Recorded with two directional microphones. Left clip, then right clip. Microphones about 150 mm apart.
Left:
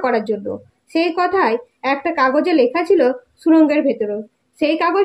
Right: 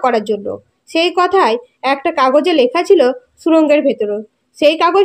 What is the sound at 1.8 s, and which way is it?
A woman's voice, 40° right (ahead or behind).